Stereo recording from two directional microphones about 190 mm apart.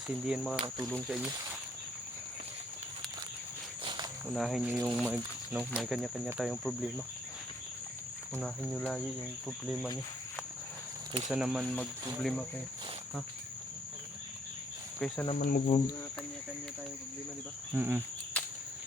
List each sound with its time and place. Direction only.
0.3 s speech: 5° right (ahead or behind)
3.8 s cricket: 20° right (ahead or behind)
4.4 s speech: centre (ahead or behind)
8.4 s speech: centre (ahead or behind)
11.3 s speech: centre (ahead or behind)
14.9 s speech: 5° left (ahead or behind)
15.4 s cricket: 45° left (ahead or behind)
17.7 s cricket: 10° right (ahead or behind)
18.3 s cricket: 10° left (ahead or behind)